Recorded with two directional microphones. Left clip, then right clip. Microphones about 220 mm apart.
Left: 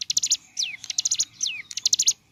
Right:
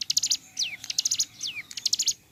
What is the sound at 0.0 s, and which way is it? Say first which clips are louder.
Bird: left 1 dB; 10° left (ahead or behind).